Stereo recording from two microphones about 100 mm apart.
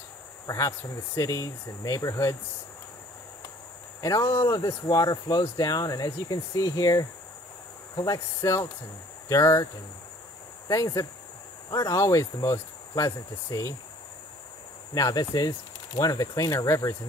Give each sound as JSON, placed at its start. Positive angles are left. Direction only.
{"t": 0.5, "sound": "speech", "side_deg": 30}
{"t": 4.0, "sound": "speech", "side_deg": 30}
{"t": 10.7, "sound": "speech", "side_deg": 35}
{"t": 15.0, "sound": "speech", "side_deg": 35}